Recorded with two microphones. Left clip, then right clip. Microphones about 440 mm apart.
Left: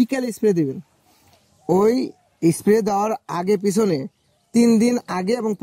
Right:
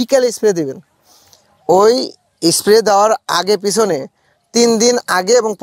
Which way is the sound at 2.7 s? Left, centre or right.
Right.